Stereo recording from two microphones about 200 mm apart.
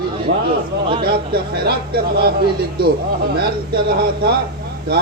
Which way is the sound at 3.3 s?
50° right (ahead or behind).